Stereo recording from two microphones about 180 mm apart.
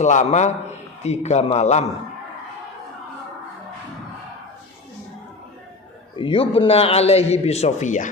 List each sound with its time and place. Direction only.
0.0 s a man's voice: 40° left (ahead or behind)
6.1 s a man's voice: 30° left (ahead or behind)